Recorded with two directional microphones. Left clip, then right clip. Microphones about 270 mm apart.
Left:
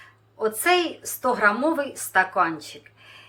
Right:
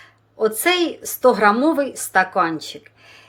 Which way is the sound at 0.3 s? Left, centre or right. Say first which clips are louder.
Right 3 dB; right.